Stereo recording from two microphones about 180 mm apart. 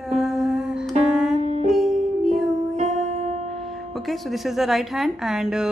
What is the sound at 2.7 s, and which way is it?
Music, 40° right (ahead or behind).